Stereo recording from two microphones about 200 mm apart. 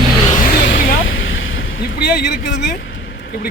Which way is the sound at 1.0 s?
75° left (ahead or behind).